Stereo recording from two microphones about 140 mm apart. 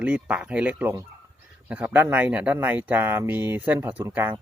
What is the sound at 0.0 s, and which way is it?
Speech, 10° right (ahead or behind).